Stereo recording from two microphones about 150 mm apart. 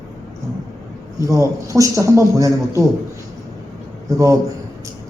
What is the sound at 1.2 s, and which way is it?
A man's voice, 20° right (ahead or behind).